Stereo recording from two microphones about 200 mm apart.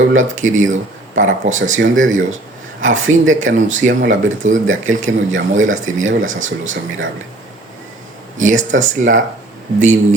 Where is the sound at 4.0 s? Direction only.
40° right (ahead or behind).